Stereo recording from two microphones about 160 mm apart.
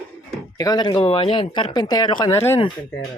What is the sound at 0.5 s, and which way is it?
Speech, 25° left (ahead or behind).